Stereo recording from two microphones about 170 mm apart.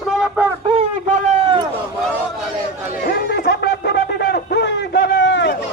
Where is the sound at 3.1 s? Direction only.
60° left (ahead or behind); by 5.6 s 90° left.